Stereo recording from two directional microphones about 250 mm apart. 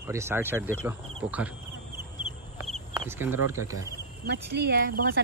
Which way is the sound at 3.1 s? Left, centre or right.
Centre.